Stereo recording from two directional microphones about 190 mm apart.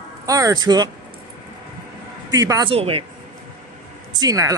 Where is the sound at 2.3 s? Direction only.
15° right (ahead or behind).